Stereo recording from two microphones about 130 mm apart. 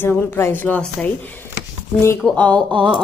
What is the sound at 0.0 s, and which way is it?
Speech, 15° left (ahead or behind).